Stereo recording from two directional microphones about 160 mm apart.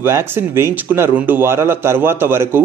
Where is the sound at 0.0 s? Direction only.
15° right (ahead or behind).